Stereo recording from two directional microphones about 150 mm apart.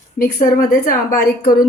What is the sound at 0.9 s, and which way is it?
Speech, 85° left.